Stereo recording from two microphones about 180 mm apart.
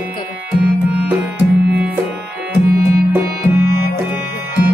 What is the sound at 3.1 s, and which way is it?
Music, 15° right (ahead or behind).